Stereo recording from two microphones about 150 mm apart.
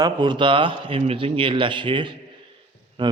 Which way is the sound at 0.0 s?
30° right (ahead or behind).